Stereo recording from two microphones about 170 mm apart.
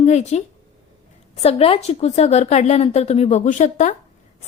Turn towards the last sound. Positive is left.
turn(degrees=45)  # may be behind; listen again after turning